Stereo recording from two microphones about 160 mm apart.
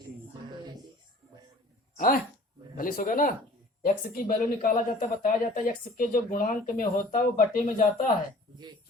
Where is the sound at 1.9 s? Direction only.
60° left (ahead or behind).